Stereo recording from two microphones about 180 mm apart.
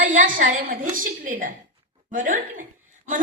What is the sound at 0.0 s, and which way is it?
A woman's voice, 45° right (ahead or behind).